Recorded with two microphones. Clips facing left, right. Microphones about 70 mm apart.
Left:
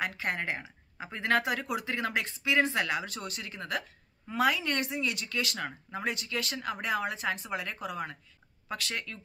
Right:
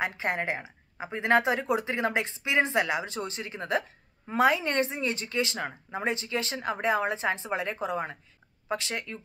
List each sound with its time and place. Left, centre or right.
0.0 s speech: right